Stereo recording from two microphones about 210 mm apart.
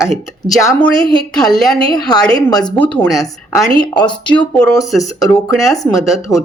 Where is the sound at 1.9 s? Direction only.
20° left (ahead or behind).